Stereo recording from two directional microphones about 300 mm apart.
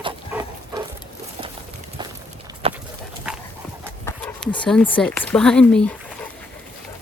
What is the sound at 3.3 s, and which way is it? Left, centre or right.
Clip-clop, centre.